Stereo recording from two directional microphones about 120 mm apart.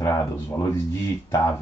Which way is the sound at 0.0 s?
30° left (ahead or behind).